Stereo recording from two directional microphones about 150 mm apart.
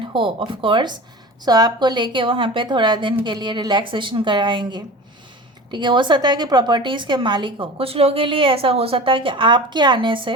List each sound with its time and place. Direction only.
0.0 s a woman's voice: 35° right (ahead or behind)